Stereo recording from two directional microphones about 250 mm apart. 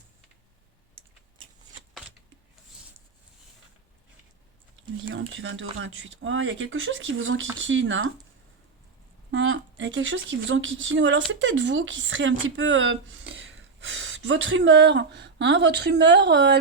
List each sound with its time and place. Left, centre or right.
1.9 s a sound: centre
5.0 s speech: right
9.3 s speech: right